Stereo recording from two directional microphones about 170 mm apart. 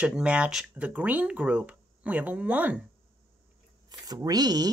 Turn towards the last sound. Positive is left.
turn(degrees=-25)  # may be behind; listen again after turning